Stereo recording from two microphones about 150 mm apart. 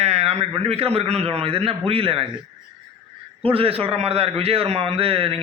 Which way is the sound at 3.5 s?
40° right (ahead or behind).